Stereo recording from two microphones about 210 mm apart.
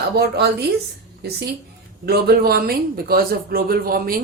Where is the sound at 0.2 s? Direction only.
50° right (ahead or behind).